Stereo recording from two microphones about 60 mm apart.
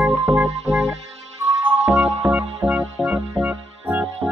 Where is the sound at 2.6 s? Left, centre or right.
Right.